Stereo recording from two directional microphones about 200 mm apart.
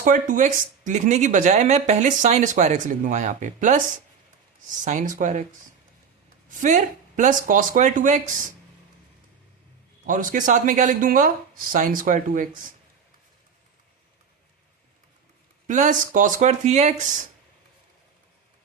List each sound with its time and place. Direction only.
0.0 s speech: 40° right (ahead or behind)
4.9 s speech: 40° right (ahead or behind)
6.5 s speech: 40° right (ahead or behind)
10.1 s speech: 40° right (ahead or behind)
15.6 s speech: 40° right (ahead or behind)